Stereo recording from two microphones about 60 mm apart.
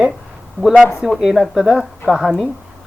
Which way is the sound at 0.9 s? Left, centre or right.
Centre.